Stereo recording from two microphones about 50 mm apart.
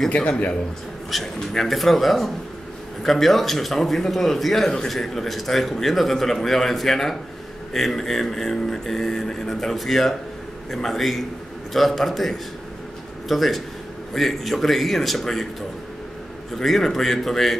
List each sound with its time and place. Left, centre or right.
0.1 s a man's voice: left
1.1 s speech: centre
16.5 s speech: centre